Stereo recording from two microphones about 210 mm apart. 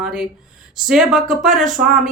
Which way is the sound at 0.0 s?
Centre (ahead or behind).